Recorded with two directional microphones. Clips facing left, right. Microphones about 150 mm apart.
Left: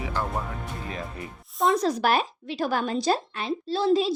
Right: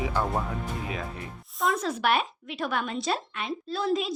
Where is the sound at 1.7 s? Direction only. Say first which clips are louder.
Left 3 dB; 35° left (ahead or behind).